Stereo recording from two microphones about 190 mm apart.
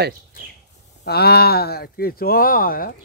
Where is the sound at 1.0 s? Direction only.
55° left (ahead or behind).